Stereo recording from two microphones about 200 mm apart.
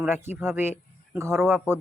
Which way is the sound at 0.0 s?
10° right (ahead or behind).